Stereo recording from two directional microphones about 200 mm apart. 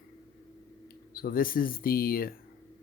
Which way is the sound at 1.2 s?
45° left (ahead or behind).